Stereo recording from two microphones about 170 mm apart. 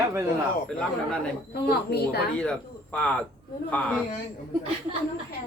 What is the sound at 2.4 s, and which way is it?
Speech, 5° left (ahead or behind).